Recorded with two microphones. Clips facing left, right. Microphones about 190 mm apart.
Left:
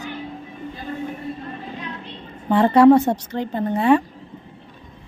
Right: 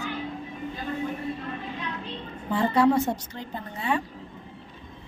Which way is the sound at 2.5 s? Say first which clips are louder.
Left 9 dB; 70° left (ahead or behind).